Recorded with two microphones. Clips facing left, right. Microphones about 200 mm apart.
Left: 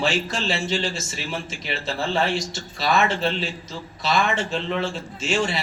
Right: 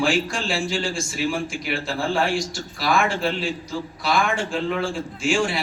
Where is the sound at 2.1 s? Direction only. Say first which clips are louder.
Right 1 dB; 20° left (ahead or behind).